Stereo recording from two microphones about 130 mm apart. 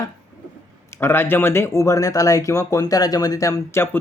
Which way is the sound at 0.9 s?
20° left (ahead or behind).